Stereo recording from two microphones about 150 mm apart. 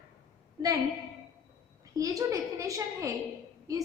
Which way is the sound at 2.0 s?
25° right (ahead or behind).